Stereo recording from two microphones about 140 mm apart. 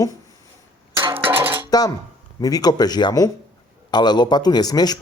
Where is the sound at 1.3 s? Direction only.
15° right (ahead or behind).